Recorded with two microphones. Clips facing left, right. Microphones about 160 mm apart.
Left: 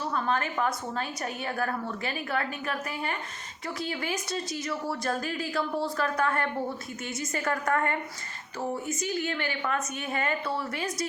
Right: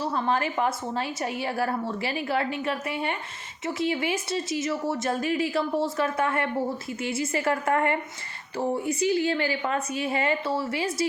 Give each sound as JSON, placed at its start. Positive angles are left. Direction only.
{"t": 0.0, "sound": "a woman's voice", "side_deg": -30}
{"t": 8.5, "sound": "a woman's voice", "side_deg": -30}